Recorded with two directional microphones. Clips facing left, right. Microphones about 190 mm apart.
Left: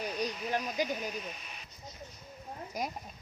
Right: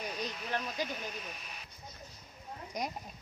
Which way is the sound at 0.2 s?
10° left (ahead or behind).